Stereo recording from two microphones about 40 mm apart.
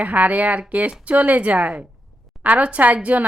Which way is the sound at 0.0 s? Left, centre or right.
Right.